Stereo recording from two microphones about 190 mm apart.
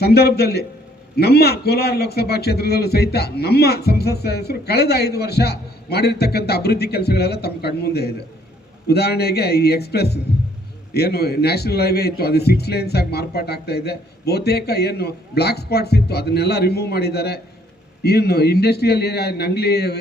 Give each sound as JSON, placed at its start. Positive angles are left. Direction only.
{"t": 0.0, "sound": "a man's voice", "side_deg": 55}